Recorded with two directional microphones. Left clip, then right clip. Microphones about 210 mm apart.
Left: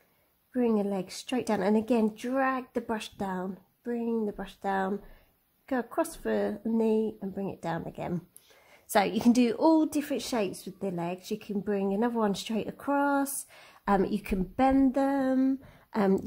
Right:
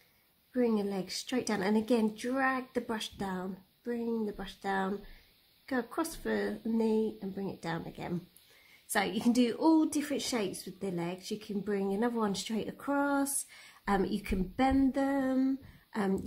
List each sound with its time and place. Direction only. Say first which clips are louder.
0.5 s a woman's voice: left 3 dB; 30° left (ahead or behind)
7.0 s speech: left 2 dB; 15° left (ahead or behind)
7.3 s a woman's voice: left 4 dB; 30° left (ahead or behind)